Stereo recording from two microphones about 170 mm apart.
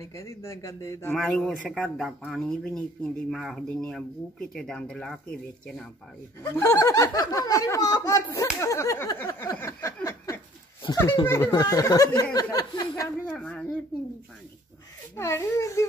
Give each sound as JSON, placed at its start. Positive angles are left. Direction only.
{"t": 0.0, "sound": "speech", "side_deg": 20}
{"t": 1.1, "sound": "speech", "side_deg": 5}
{"t": 6.5, "sound": "speech", "side_deg": 15}
{"t": 10.0, "sound": "a sound", "side_deg": 20}
{"t": 11.2, "sound": "speech", "side_deg": 15}
{"t": 13.3, "sound": "speech", "side_deg": 5}
{"t": 15.1, "sound": "speech", "side_deg": 15}